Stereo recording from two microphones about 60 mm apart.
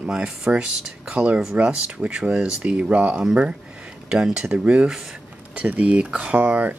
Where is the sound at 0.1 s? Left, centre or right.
Centre.